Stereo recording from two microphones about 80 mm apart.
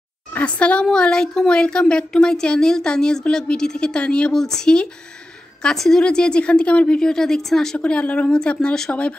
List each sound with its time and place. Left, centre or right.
0.3 s speech: centre